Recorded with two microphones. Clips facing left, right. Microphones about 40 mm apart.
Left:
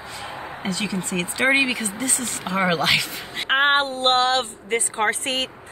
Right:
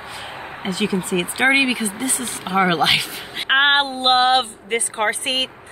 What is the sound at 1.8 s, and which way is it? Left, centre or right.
Speech, centre.